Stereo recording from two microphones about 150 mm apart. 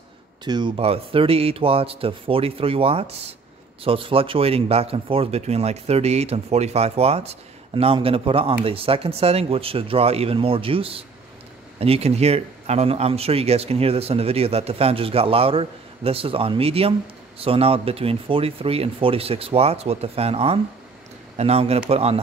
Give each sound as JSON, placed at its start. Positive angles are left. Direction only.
{"t": 0.5, "sound": "speech", "side_deg": -30}